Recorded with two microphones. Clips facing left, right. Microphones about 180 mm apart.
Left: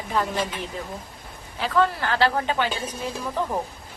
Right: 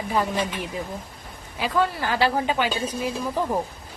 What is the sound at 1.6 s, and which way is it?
A woman's voice, 10° right (ahead or behind).